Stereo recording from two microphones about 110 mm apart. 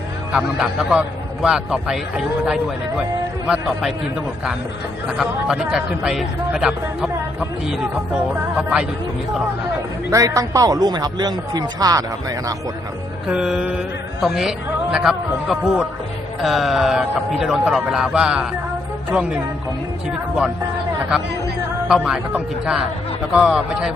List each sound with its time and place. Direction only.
0.3 s a man's voice: 5° right (ahead or behind)
5.1 s a man's voice: 5° right (ahead or behind)
10.1 s speech: 30° right (ahead or behind)
13.2 s speech: 5° right (ahead or behind)
21.8 s a man's voice: 5° right (ahead or behind)